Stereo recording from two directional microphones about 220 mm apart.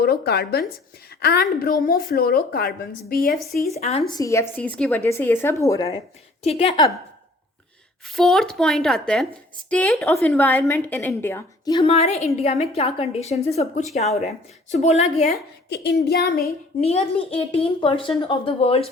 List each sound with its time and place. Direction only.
0.0 s speech: 45° left (ahead or behind)
3.8 s a woman's voice: 30° left (ahead or behind)
4.1 s a woman's voice: 15° left (ahead or behind)
6.4 s a woman's voice: 30° left (ahead or behind)
8.0 s a woman's voice: centre (ahead or behind); by 14.0 s 30° left (ahead or behind)
14.0 s a woman's voice: centre (ahead or behind)
14.7 s a woman's voice: 30° left (ahead or behind)
15.7 s speech: 50° left (ahead or behind)
16.8 s a woman's voice: 25° left (ahead or behind)